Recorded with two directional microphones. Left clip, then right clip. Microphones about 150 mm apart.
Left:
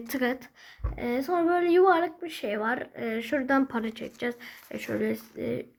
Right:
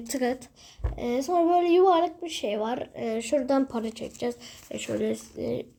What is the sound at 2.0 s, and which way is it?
A woman's voice, centre (ahead or behind).